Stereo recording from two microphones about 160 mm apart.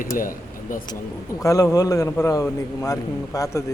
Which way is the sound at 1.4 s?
20° left (ahead or behind).